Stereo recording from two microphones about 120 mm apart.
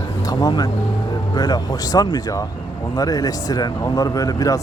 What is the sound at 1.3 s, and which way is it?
Speech, 35° left (ahead or behind).